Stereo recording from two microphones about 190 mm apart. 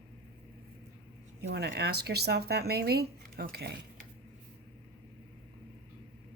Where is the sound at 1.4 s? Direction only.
60° right (ahead or behind).